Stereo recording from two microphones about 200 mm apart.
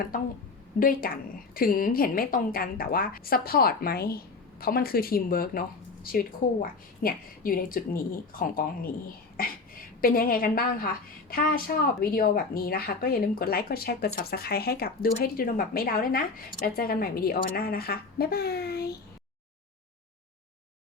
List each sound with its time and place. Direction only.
0.8 s a woman's voice: 45° left (ahead or behind)